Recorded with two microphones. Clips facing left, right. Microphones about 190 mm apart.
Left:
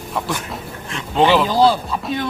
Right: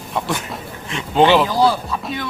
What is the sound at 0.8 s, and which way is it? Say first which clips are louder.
Speech: right 2 dB; centre (ahead or behind).